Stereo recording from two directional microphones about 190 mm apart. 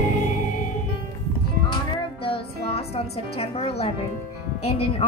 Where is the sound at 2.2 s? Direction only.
30° left (ahead or behind).